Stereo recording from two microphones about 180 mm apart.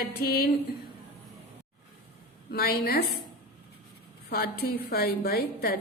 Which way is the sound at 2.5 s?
60° left (ahead or behind).